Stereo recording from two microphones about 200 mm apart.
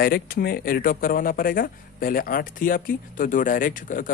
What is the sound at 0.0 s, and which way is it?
Speech, 50° left (ahead or behind).